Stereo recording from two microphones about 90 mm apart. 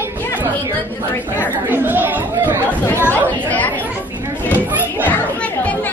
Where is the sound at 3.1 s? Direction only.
20° left (ahead or behind).